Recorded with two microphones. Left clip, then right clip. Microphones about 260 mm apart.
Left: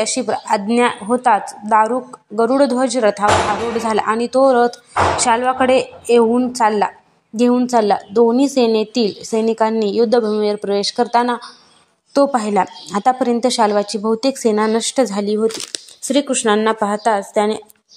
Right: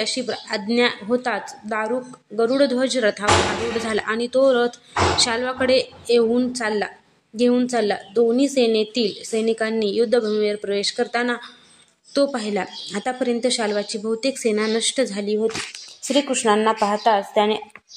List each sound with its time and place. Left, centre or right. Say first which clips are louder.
0.0 s a woman's voice: left 6 dB; centre
4.5 s speech: left 6 dB; centre
5.1 s a woman's voice: left 6 dB; centre